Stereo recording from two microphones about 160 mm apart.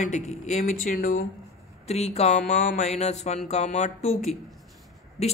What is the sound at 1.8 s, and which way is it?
Speech, 45° left (ahead or behind).